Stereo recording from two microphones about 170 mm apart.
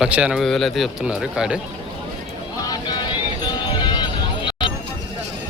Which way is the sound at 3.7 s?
25° left (ahead or behind).